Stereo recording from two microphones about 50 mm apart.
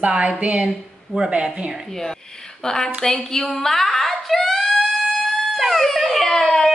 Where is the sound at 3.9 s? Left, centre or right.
Centre.